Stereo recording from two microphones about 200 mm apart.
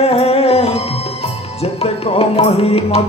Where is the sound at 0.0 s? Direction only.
30° left (ahead or behind).